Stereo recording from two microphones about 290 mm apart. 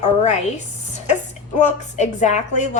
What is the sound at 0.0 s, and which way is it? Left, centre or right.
Speech, left.